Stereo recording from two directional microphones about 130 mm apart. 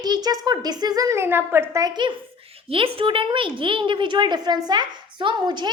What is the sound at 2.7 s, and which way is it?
A woman's voice, 45° right (ahead or behind).